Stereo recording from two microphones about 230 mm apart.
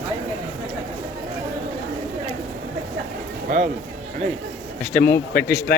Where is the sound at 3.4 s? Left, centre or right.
Right.